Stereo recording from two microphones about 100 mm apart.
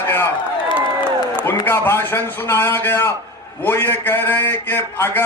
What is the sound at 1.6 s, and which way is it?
A man's voice, 20° left (ahead or behind).